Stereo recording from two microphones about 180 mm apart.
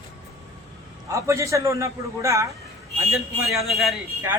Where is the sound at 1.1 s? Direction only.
15° right (ahead or behind).